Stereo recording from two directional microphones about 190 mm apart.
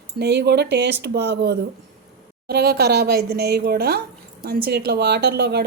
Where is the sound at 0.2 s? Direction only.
60° right (ahead or behind).